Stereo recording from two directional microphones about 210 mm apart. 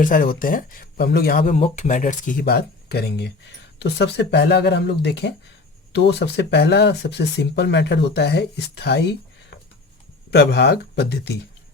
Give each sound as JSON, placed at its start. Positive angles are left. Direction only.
{"t": 0.0, "sound": "speech", "side_deg": 40}